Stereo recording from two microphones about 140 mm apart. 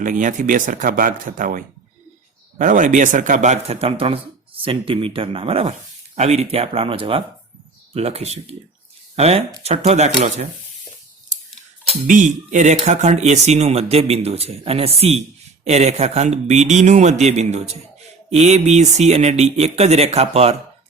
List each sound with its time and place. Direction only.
0.0 s speech: 65° right (ahead or behind)
12.0 s speech: 65° right (ahead or behind); by 20.6 s 50° right (ahead or behind)